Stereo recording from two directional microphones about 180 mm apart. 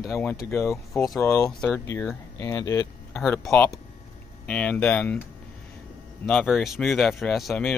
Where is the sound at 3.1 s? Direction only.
5° left (ahead or behind).